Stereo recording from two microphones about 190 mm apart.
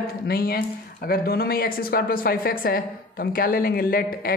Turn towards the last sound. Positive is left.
turn(degrees=50)  # may be behind; listen again after turning